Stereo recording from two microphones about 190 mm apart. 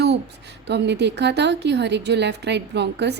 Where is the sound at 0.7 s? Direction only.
65° right (ahead or behind).